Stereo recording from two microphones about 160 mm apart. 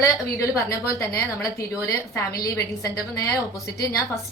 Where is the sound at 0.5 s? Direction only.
20° left (ahead or behind).